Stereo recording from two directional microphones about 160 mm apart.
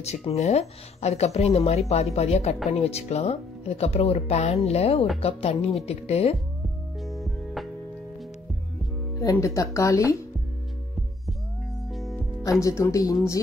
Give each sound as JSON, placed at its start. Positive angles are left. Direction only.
{"t": 0.0, "sound": "speech", "side_deg": 40}
{"t": 7.0, "sound": "music", "side_deg": 0}
{"t": 9.2, "sound": "speech", "side_deg": 20}
{"t": 11.9, "sound": "music", "side_deg": 0}
{"t": 12.4, "sound": "speech", "side_deg": 20}